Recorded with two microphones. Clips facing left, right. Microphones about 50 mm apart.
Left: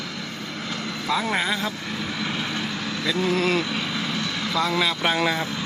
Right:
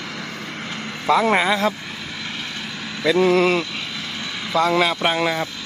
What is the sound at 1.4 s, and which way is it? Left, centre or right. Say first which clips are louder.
Speech: right 6 dB; right.